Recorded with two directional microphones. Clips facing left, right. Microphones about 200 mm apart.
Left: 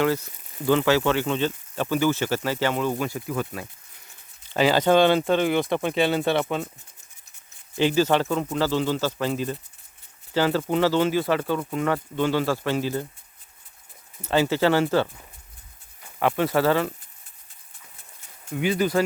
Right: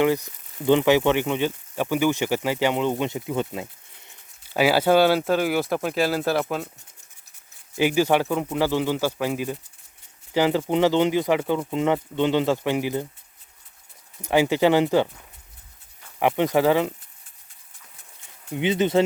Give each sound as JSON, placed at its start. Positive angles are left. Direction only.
{"t": 0.0, "sound": "speech", "side_deg": -15}
{"t": 4.4, "sound": "speech", "side_deg": -10}
{"t": 7.8, "sound": "speech", "side_deg": -10}
{"t": 14.2, "sound": "speech", "side_deg": -15}
{"t": 16.1, "sound": "speech", "side_deg": -15}
{"t": 18.5, "sound": "speech", "side_deg": -20}